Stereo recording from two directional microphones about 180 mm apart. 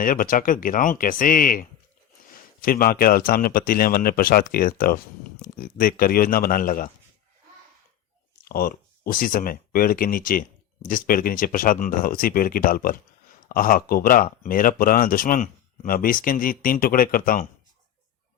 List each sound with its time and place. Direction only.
0.0 s speech: 50° left (ahead or behind)
8.4 s speech: 55° left (ahead or behind)